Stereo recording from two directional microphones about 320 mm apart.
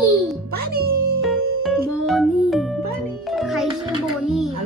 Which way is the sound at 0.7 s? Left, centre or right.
Right.